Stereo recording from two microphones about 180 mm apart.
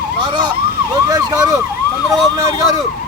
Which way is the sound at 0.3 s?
25° right (ahead or behind).